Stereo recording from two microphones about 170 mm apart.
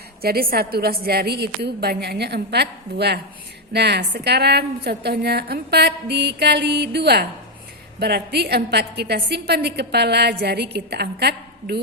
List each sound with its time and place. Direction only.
0.2 s a woman's voice: 65° right (ahead or behind)